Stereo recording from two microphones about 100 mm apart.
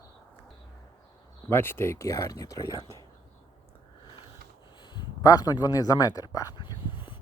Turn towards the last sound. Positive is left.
turn(degrees=60)  # may be behind; listen again after turning